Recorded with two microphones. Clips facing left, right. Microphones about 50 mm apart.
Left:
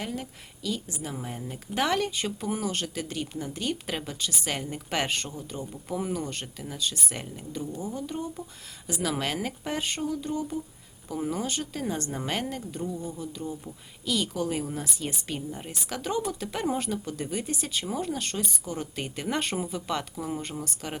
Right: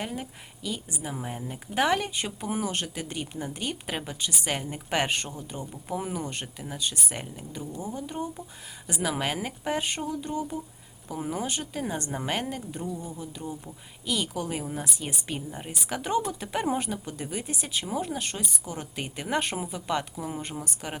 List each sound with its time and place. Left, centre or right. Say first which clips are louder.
0.0 s a woman's voice: even; centre